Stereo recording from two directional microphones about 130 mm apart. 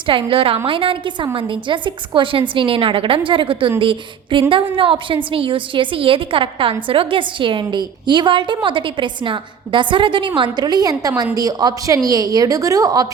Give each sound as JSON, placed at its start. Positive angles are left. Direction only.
{"t": 0.0, "sound": "a woman's voice", "side_deg": -40}